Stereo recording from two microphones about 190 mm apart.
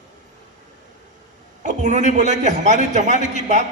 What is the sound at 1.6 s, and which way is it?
A man's voice, 40° right (ahead or behind).